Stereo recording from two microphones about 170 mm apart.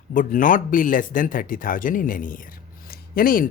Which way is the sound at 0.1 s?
50° left (ahead or behind).